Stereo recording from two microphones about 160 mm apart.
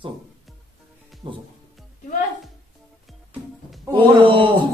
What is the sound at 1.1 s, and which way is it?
Music, centre (ahead or behind).